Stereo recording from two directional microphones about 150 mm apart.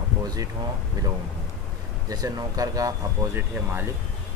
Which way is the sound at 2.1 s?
25° right (ahead or behind).